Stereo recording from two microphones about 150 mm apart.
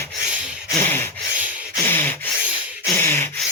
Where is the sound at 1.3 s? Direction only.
10° right (ahead or behind).